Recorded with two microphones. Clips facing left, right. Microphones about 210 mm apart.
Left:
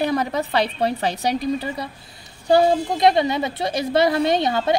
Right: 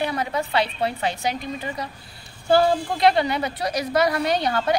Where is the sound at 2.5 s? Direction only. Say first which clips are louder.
Left 2 dB; 20° left (ahead or behind).